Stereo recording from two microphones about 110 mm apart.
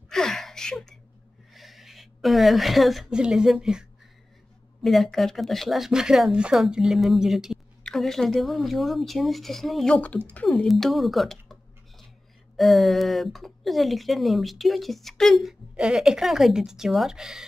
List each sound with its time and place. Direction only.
0.1 s gasp: 5° left (ahead or behind)
1.5 s a woman's voice: centre (ahead or behind)
4.8 s a woman's voice: centre (ahead or behind)
12.5 s a woman's voice: centre (ahead or behind)